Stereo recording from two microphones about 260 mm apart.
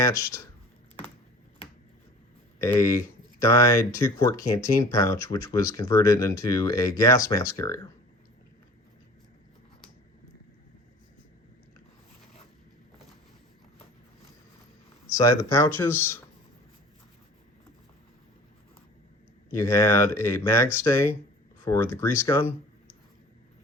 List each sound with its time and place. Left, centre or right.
0.0 s speech: centre
2.6 s speech: centre
15.1 s speech: centre
19.5 s speech: centre